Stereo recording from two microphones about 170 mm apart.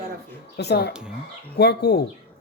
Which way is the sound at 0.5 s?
75° left (ahead or behind).